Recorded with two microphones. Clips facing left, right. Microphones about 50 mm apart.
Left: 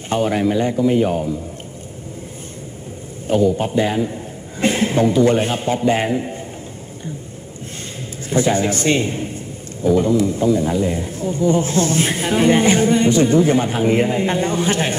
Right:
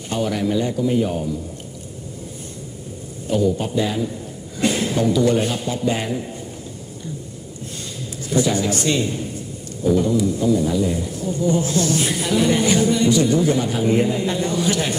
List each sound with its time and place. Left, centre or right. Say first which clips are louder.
0.1 s a man's voice: left 4 dB; left
3.6 s a man's voice: left 3 dB; left
8.3 s a man's voice: left 2 dB; left